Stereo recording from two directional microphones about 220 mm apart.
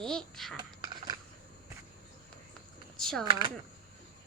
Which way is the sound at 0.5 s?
20° right (ahead or behind).